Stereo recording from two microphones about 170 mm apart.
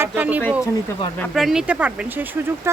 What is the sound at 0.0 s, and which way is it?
Speech, 10° right (ahead or behind).